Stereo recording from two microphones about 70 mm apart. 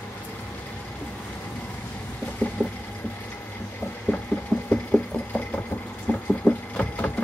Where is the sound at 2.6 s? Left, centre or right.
Left.